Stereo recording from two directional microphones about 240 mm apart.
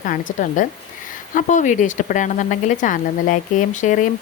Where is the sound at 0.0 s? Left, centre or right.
Left.